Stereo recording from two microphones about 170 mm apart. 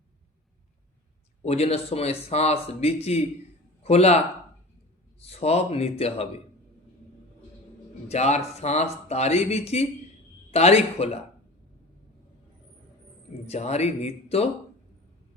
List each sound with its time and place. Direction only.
1.4 s speech: 40° left (ahead or behind)
5.2 s speech: 35° left (ahead or behind)
8.0 s speech: 40° left (ahead or behind)
13.5 s speech: 40° left (ahead or behind)